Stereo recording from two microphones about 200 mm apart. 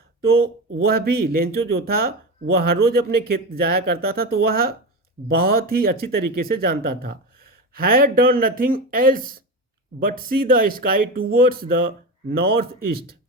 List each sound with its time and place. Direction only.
0.9 s speech: 50° right (ahead or behind)